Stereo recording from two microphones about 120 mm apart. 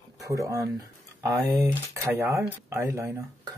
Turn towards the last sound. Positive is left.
turn(degrees=-25)  # may be behind; listen again after turning